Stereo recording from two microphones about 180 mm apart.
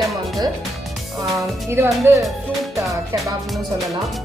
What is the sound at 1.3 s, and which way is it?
Speech, 15° right (ahead or behind).